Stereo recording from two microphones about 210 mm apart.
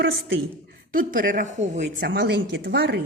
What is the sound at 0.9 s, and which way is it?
A woman's voice, 40° right (ahead or behind).